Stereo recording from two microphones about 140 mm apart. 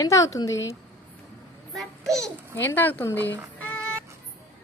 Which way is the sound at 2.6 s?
15° left (ahead or behind).